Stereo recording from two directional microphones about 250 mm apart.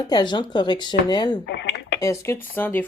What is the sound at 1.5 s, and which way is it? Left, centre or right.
Speech, left.